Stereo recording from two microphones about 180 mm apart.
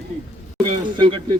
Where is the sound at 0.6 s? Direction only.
30° right (ahead or behind).